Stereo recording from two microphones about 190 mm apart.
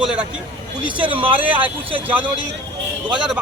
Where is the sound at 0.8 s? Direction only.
5° right (ahead or behind).